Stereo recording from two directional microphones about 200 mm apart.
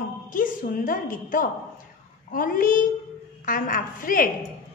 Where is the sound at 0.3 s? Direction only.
40° left (ahead or behind).